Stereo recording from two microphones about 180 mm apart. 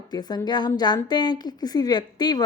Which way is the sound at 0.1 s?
20° left (ahead or behind).